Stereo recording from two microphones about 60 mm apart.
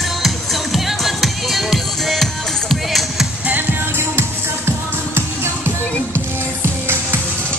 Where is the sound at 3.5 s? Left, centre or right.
Right.